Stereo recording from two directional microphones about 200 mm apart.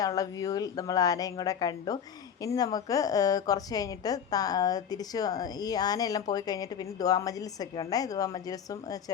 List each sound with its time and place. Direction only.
0.0 s a woman's voice: 20° left (ahead or behind)